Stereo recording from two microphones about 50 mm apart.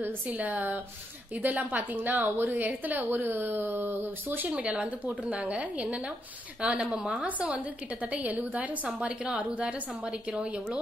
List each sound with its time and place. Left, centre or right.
0.3 s a woman's voice: right
4.5 s a woman's voice: right